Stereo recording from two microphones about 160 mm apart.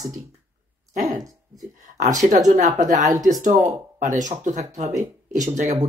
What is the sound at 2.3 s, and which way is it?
Speech, 50° right (ahead or behind).